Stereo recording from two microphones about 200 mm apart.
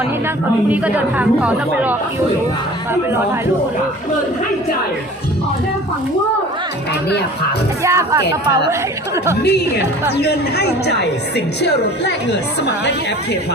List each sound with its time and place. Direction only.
0.7 s speech: 10° right (ahead or behind)
7.8 s speech: 15° right (ahead or behind)
9.4 s a woman's voice: 55° left (ahead or behind)